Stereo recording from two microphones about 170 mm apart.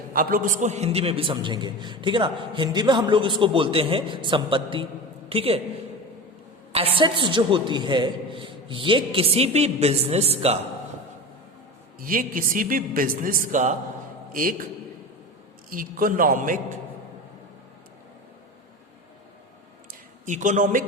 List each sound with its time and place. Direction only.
0.1 s a man's voice: 60° right (ahead or behind); by 5.5 s 35° right (ahead or behind)
6.7 s a man's voice: 35° right (ahead or behind)
11.9 s a man's voice: 55° right (ahead or behind)
15.7 s a man's voice: 55° right (ahead or behind)
19.9 s a sound: 50° right (ahead or behind)